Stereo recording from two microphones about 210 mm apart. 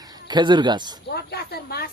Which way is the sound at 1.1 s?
50° left (ahead or behind).